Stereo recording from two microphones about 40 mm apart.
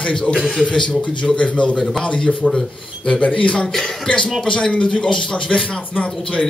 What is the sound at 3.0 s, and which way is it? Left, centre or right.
Speech, left.